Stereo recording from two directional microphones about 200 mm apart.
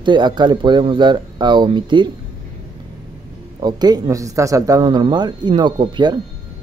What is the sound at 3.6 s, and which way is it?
Speech, 20° right (ahead or behind).